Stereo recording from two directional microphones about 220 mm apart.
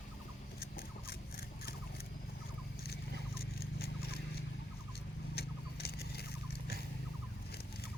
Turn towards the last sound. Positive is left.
turn(degrees=45)  # may be behind; listen again after turning